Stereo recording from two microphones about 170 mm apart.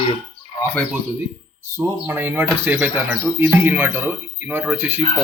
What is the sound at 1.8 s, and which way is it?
Speech, 15° right (ahead or behind).